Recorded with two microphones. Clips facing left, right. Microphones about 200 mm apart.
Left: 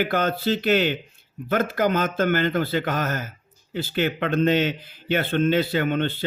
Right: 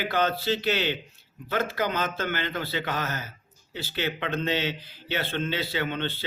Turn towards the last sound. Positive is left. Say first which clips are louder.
# left 8 dB
turn(degrees=50)  # may be behind; listen again after turning